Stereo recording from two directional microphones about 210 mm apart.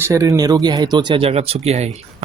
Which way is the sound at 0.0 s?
15° right (ahead or behind).